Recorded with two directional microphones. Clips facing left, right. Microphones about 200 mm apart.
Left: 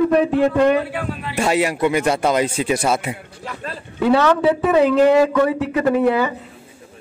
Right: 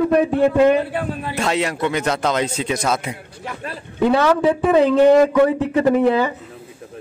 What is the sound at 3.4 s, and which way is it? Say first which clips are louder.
A man's voice: even; 15° right (ahead or behind).